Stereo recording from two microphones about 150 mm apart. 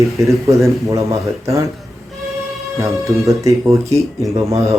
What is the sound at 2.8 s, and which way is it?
Speech, 20° right (ahead or behind).